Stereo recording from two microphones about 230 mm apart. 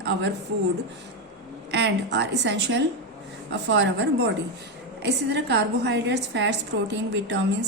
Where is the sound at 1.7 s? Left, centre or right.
Right.